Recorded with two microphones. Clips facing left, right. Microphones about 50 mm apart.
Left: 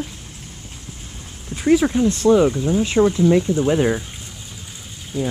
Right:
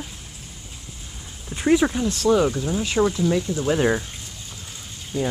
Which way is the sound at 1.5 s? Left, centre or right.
Centre.